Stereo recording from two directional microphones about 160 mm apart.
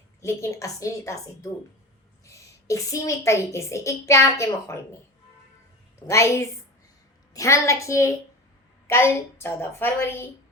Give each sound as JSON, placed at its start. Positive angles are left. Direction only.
{"t": 0.2, "sound": "a woman's voice", "side_deg": 20}
{"t": 6.1, "sound": "a woman's voice", "side_deg": 15}